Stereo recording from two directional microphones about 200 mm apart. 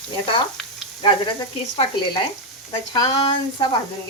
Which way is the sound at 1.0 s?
25° left (ahead or behind).